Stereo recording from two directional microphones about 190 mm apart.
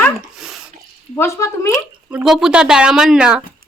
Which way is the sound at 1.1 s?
15° left (ahead or behind).